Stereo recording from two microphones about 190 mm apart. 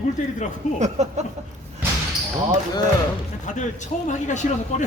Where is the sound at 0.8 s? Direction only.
35° right (ahead or behind).